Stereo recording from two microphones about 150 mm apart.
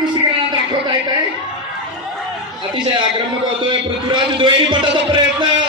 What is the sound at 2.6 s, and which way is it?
A man's voice, 30° right (ahead or behind).